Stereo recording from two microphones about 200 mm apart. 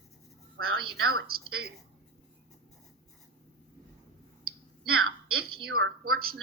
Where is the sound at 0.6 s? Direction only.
90° right.